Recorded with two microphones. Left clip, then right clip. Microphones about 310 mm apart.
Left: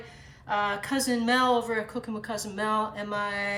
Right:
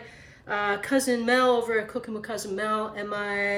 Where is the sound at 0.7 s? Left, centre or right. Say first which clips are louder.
Right 4 dB; centre.